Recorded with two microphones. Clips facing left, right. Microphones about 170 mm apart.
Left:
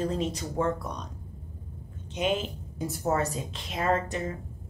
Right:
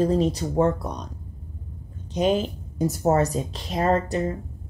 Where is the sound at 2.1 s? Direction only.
40° right (ahead or behind).